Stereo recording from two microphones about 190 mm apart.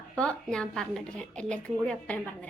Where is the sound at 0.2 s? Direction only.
5° left (ahead or behind).